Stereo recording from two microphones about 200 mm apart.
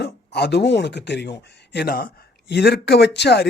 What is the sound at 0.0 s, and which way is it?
Speech, 55° left (ahead or behind).